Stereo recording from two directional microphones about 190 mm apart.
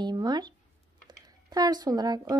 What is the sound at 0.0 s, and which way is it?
A woman's voice, 20° right (ahead or behind).